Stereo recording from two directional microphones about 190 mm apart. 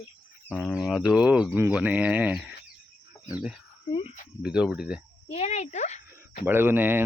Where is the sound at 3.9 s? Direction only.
30° left (ahead or behind).